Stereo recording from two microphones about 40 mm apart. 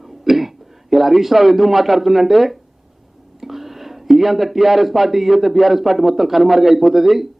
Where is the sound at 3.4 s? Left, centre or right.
Centre.